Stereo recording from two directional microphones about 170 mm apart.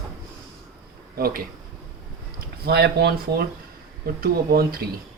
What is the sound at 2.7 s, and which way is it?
Speech, 75° right (ahead or behind).